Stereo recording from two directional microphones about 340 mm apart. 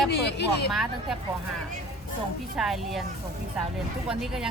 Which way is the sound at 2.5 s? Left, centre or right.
Centre.